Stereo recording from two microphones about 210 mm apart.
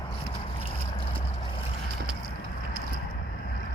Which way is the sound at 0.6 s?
25° left (ahead or behind).